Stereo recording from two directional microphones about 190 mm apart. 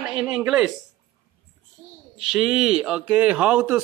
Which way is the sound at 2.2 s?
Centre (ahead or behind).